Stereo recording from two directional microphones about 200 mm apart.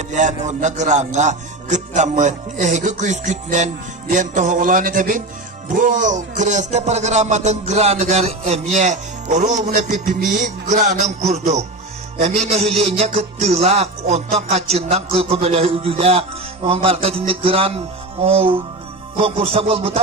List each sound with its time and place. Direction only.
0.1 s music: 40° right (ahead or behind)